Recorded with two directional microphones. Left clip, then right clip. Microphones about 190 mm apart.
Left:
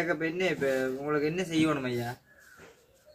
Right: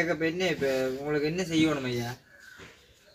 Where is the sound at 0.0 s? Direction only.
15° right (ahead or behind).